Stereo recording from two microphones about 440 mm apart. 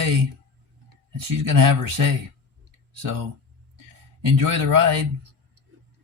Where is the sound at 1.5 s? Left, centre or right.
Right.